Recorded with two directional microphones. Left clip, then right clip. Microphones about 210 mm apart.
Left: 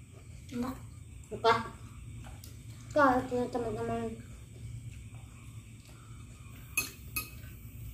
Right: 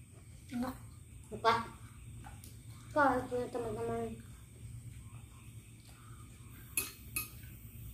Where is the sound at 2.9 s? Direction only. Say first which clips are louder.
Left 4 dB; 20° left (ahead or behind).